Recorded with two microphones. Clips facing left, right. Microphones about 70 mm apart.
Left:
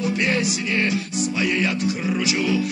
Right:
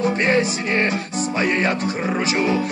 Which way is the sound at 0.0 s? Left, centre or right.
Right.